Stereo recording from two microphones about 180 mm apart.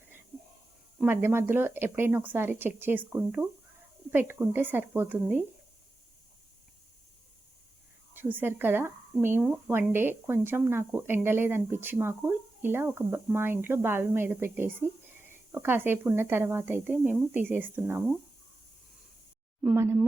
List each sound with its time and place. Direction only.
0.9 s speech: 10° right (ahead or behind)
8.1 s speech: 10° right (ahead or behind)
19.6 s speech: 15° right (ahead or behind)